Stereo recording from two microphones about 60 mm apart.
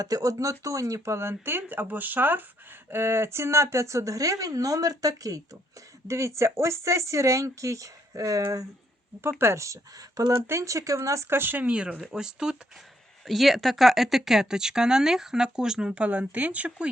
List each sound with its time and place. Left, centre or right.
0.0 s speech: right
2.9 s speech: right
6.1 s speech: right
9.4 s speech: right
10.4 s speech: right
11.3 s speech: right
11.6 s speech: right
13.2 s speech: centre